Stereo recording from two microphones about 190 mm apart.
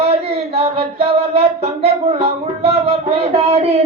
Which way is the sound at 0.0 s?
35° right (ahead or behind).